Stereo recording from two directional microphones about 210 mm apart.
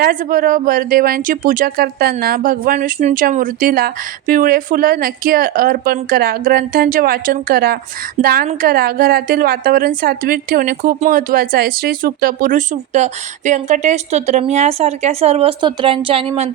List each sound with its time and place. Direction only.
0.0 s a woman's voice: 40° right (ahead or behind)